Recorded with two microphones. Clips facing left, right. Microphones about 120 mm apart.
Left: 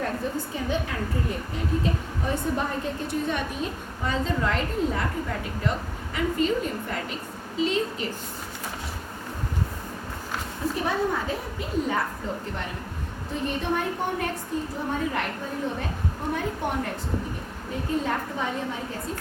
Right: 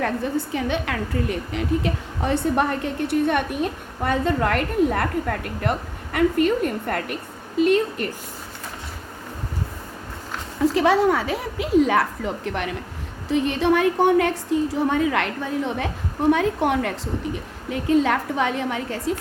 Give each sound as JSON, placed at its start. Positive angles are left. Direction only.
{"t": 0.0, "sound": "a woman's voice", "side_deg": -75}
{"t": 10.8, "sound": "a woman's voice", "side_deg": -90}